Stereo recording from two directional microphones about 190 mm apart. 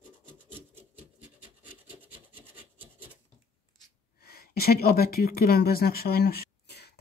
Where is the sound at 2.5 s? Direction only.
10° right (ahead or behind).